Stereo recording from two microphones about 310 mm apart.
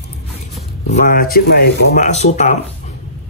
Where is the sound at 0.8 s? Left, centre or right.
Left.